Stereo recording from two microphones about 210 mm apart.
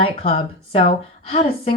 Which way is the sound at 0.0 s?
25° left (ahead or behind).